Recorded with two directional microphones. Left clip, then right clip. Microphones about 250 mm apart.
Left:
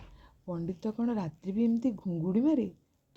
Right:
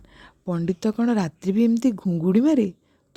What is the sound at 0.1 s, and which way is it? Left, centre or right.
Speech, right.